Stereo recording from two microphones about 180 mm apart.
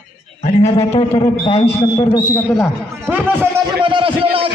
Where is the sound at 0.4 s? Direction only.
40° left (ahead or behind).